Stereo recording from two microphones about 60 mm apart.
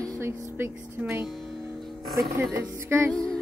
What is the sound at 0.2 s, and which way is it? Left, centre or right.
Speech, right.